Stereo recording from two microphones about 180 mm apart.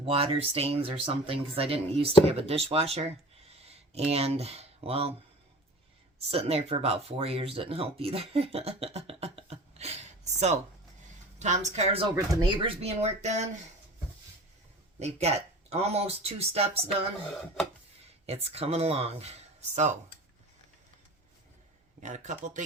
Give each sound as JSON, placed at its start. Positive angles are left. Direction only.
{"t": 0.0, "sound": "speech", "side_deg": -30}
{"t": 6.1, "sound": "speech", "side_deg": -35}
{"t": 12.1, "sound": "speech", "side_deg": -20}
{"t": 14.9, "sound": "speech", "side_deg": -35}
{"t": 18.5, "sound": "speech", "side_deg": -35}
{"t": 22.0, "sound": "speech", "side_deg": -40}